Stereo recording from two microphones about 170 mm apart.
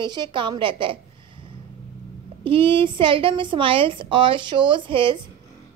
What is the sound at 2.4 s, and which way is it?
A woman's voice, 30° right (ahead or behind).